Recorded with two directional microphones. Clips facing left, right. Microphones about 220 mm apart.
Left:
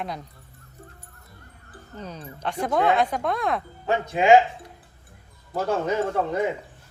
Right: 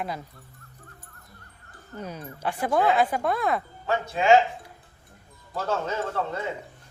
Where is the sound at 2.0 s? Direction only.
10° right (ahead or behind).